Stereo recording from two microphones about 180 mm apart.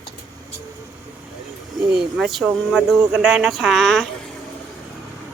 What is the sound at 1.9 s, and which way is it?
Speech, 5° right (ahead or behind).